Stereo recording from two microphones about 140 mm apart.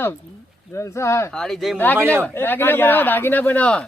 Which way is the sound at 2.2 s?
15° left (ahead or behind).